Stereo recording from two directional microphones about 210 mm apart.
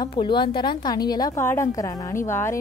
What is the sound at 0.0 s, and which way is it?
A woman's voice, 20° left (ahead or behind).